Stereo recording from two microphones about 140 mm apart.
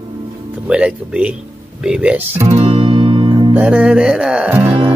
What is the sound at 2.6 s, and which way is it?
Music, 40° right (ahead or behind).